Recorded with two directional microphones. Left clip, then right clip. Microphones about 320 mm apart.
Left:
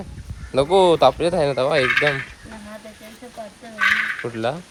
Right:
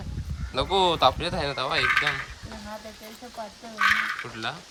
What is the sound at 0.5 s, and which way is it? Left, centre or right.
Speech, centre.